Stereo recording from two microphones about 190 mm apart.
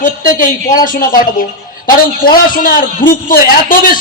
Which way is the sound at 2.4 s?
45° left (ahead or behind).